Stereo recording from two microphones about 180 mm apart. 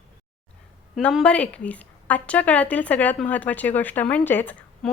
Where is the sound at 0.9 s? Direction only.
Centre (ahead or behind).